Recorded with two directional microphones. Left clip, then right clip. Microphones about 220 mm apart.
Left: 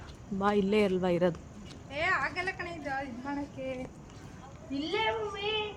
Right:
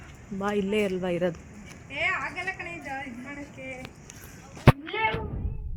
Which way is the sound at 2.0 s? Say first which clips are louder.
Right 1 dB; 20° left (ahead or behind).